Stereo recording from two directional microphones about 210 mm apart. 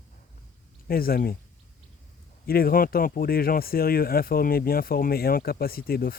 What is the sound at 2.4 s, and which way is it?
Speech, 45° left (ahead or behind).